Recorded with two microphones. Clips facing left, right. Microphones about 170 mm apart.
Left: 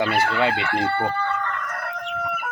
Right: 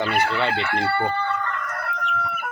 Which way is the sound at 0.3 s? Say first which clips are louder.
Left 2 dB; 5° left (ahead or behind).